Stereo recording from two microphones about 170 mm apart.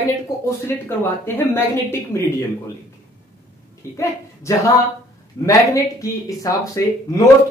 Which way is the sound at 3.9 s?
15° left (ahead or behind).